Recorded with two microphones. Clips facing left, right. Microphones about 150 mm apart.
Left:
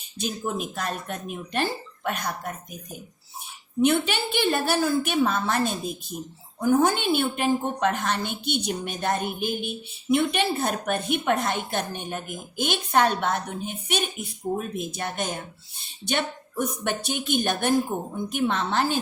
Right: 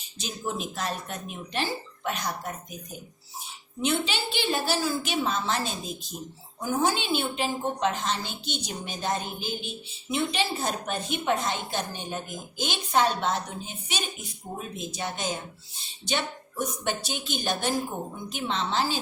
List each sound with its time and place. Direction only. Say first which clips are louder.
0.2 s speech: left 4 dB; 55° left (ahead or behind)
3.8 s a woman's voice: left 6 dB; 55° left (ahead or behind)